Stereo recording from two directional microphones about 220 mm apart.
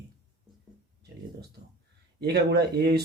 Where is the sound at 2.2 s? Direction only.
50° right (ahead or behind).